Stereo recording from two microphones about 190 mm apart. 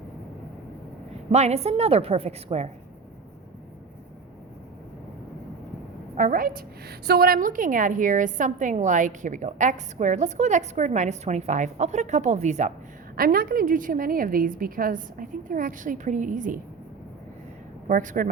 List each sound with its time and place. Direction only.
1.3 s a woman's voice: 35° right (ahead or behind)
6.1 s a woman's voice: 45° right (ahead or behind)
13.1 s a woman's voice: 50° right (ahead or behind)
17.8 s a woman's voice: 45° right (ahead or behind)